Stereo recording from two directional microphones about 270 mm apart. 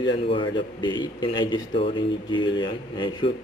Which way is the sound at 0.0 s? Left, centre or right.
Centre.